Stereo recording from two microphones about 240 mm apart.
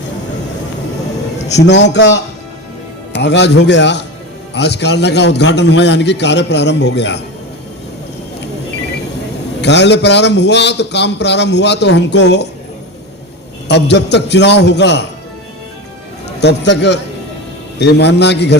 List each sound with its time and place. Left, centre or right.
1.9 s a man's voice: left
9.6 s a man's voice: left
13.7 s a man's voice: left
16.4 s a man's voice: left